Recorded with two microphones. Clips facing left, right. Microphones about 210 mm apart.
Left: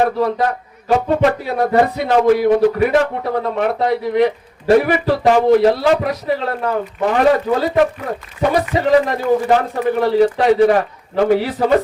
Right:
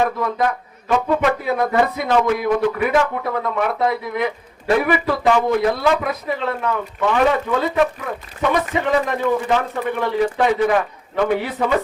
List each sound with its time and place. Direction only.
0.0 s speech: 35° left (ahead or behind)